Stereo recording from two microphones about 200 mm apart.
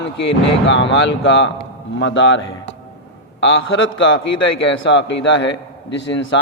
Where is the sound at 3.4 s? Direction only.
70° left (ahead or behind).